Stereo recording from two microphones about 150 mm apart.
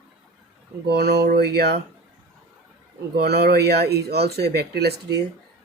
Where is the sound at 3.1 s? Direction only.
90° right.